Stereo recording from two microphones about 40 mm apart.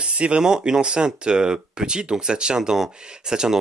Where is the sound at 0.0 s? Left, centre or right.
Right.